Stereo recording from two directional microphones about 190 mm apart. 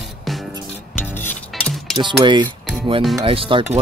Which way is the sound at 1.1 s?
10° left (ahead or behind).